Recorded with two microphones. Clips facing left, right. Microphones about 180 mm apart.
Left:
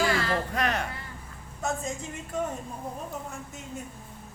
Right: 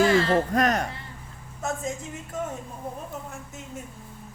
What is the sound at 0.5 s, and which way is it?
Speech, 40° right (ahead or behind).